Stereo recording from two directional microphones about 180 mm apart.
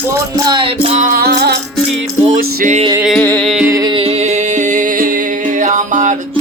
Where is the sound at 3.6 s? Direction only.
20° right (ahead or behind); by 6.2 s 45° right (ahead or behind).